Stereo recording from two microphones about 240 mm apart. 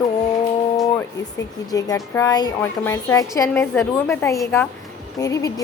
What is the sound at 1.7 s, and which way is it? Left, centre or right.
A woman's voice, centre.